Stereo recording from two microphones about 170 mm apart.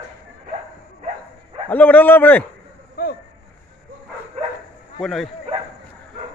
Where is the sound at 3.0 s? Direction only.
65° left (ahead or behind).